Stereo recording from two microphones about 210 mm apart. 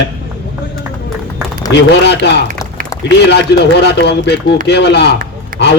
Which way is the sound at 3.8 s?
55° left (ahead or behind).